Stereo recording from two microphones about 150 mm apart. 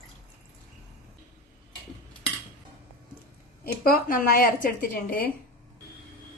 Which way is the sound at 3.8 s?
75° left (ahead or behind).